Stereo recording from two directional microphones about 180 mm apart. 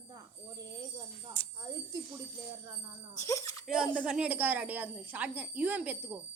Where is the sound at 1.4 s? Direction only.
10° left (ahead or behind).